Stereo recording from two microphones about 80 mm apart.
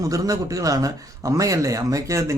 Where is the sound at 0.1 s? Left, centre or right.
Right.